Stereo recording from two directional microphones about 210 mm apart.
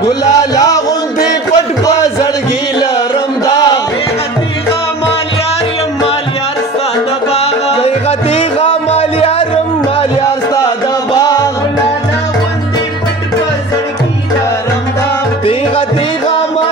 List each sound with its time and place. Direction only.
0.0 s music: 15° left (ahead or behind)
3.4 s music: 20° left (ahead or behind)
7.3 s music: 30° left (ahead or behind)
11.1 s music: 15° left (ahead or behind)